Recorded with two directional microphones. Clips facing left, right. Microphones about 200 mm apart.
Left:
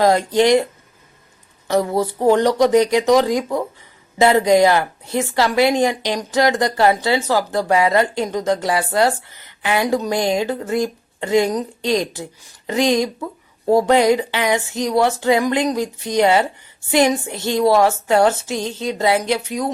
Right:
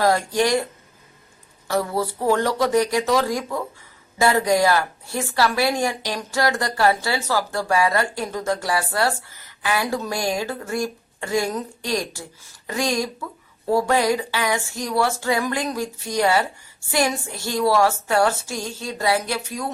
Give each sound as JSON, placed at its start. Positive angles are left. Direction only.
{"t": 0.0, "sound": "speech", "side_deg": 20}
{"t": 1.6, "sound": "speech", "side_deg": 20}